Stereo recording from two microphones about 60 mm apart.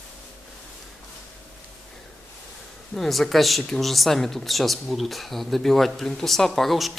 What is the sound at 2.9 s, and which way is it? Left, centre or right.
Speech, centre.